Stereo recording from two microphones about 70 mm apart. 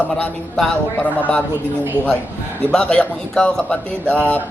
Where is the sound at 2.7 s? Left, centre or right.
Centre.